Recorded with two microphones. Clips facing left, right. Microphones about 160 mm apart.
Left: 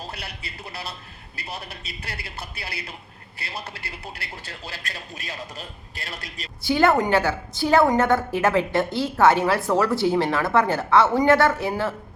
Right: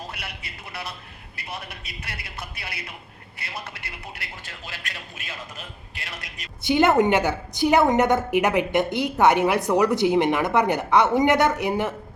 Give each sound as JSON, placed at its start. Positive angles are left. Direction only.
{"t": 0.1, "sound": "a man's voice", "side_deg": 35}
{"t": 6.6, "sound": "a woman's voice", "side_deg": -20}